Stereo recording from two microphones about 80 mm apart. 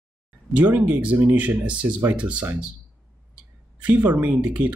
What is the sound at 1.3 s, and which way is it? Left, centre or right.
Speech, centre.